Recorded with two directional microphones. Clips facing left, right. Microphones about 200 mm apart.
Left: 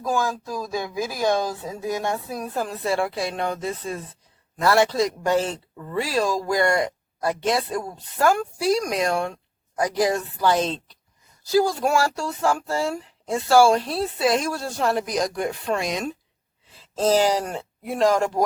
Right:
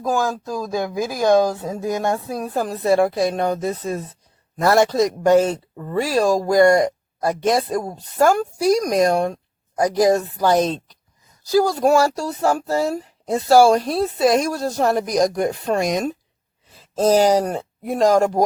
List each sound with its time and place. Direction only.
1.0 s speech: 45° right (ahead or behind)